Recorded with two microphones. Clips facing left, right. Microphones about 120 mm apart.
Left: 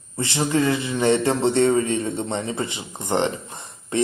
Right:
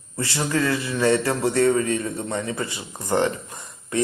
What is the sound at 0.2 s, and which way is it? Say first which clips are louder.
A man's voice: left 2 dB; 20° left (ahead or behind).